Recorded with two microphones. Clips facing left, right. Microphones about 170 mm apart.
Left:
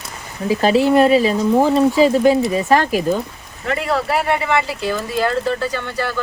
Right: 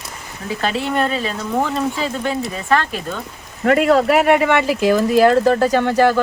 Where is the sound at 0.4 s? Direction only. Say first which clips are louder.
Left 7 dB; 35° left (ahead or behind).